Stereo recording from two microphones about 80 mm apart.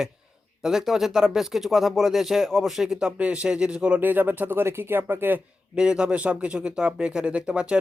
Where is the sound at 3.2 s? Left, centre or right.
Centre.